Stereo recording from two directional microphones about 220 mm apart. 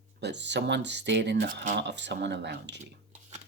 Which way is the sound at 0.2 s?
50° right (ahead or behind).